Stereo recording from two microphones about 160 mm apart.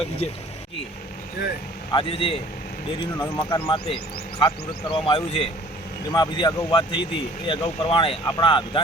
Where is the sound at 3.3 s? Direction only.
15° left (ahead or behind).